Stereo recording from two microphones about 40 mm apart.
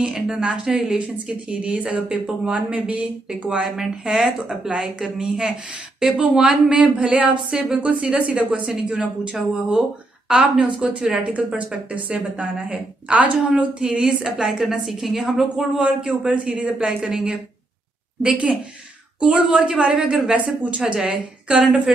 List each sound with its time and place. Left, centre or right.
0.0 s speech: right
1.5 s a woman's voice: right
4.5 s a woman's voice: right
13.8 s a woman's voice: centre
14.6 s a woman's voice: centre
15.5 s a woman's voice: right
16.7 s a woman's voice: centre
18.2 s a woman's voice: right
19.5 s a woman's voice: centre
20.3 s a woman's voice: right